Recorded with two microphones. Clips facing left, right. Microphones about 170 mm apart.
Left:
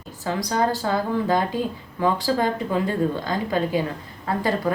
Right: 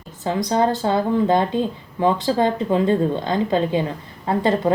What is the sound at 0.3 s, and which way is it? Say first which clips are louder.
A woman's voice: right 4 dB; 20° right (ahead or behind).